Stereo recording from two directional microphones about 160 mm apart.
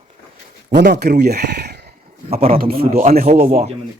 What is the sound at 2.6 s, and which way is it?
Speech, 70° right (ahead or behind).